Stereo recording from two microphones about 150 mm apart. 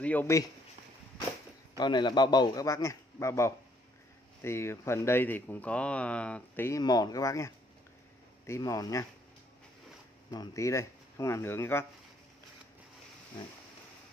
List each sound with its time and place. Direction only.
0.0 s speech: 10° left (ahead or behind)
1.8 s a man's voice: 30° left (ahead or behind); by 6.8 s 15° left (ahead or behind)
6.8 s a man's voice: 25° left (ahead or behind)
10.3 s a man's voice: 25° left (ahead or behind)